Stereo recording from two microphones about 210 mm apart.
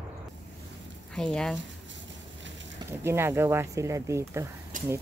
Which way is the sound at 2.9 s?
10° right (ahead or behind).